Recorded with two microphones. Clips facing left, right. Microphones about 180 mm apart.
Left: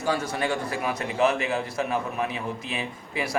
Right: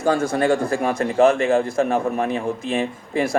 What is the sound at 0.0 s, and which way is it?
A man's voice, 50° right (ahead or behind).